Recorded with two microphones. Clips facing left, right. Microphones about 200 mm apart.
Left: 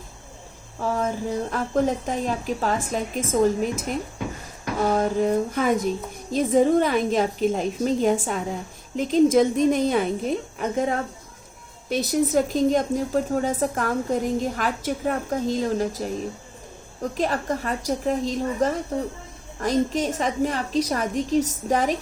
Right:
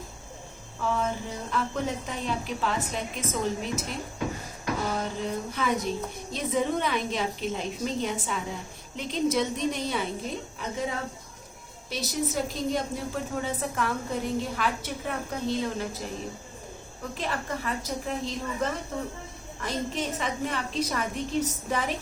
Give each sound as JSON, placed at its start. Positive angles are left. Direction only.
{"t": 0.8, "sound": "a sound", "side_deg": 40}
{"t": 1.5, "sound": "a woman's voice", "side_deg": 45}
{"t": 17.0, "sound": "a woman's voice", "side_deg": 40}